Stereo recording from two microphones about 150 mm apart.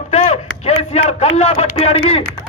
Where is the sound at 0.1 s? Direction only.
45° left (ahead or behind).